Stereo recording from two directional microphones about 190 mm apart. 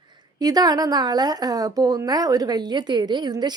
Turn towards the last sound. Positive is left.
turn(degrees=-20)  # may be behind; listen again after turning